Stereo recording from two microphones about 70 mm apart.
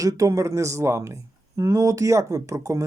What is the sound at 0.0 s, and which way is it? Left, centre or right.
Speech, right.